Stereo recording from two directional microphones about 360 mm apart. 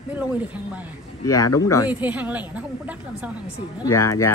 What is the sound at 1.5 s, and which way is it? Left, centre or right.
Speech, centre.